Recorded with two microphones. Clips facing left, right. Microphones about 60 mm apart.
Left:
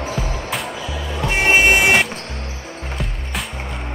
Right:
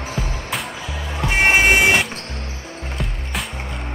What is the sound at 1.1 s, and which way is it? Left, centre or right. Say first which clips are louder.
Music: even; right.